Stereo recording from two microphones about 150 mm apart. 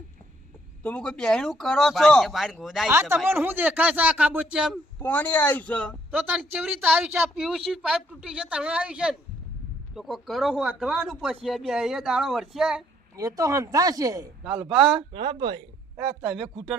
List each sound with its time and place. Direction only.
0.8 s speech: 10° left (ahead or behind)
3.2 s a woman's voice: 15° right (ahead or behind)
4.9 s speech: 15° left (ahead or behind)
6.1 s a woman's voice: 10° right (ahead or behind)
13.1 s speech: 25° right (ahead or behind)
14.6 s speech: 5° right (ahead or behind)
15.1 s speech: 30° right (ahead or behind)
16.0 s speech: 5° right (ahead or behind)